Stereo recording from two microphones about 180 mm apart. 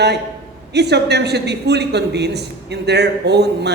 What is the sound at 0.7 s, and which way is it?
A man's voice, 70° right (ahead or behind).